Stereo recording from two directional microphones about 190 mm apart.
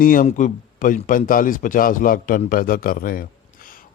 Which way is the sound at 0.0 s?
45° left (ahead or behind).